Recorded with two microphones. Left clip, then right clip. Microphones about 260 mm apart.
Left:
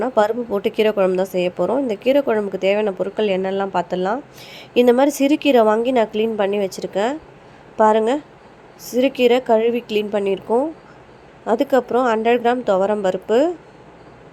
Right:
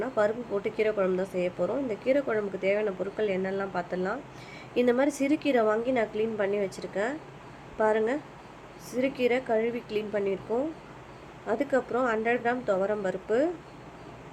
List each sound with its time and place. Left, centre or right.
0.0 s a woman's voice: left